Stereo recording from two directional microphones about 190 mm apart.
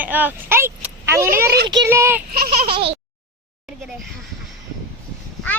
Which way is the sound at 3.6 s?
Centre (ahead or behind).